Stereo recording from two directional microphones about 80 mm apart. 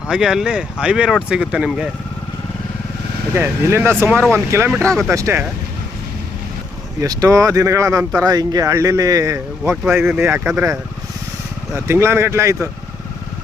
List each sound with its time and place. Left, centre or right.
0.1 s speech: centre
3.3 s speech: right
7.0 s speech: right
9.9 s speech: right
11.7 s speech: right